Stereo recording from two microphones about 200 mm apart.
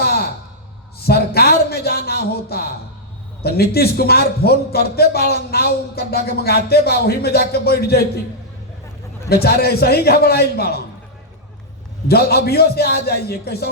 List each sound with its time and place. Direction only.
1.0 s a sound: 50° left (ahead or behind)
3.4 s a man's voice: 50° left (ahead or behind)
9.3 s a man's voice: 50° left (ahead or behind)
12.0 s a man's voice: 50° left (ahead or behind)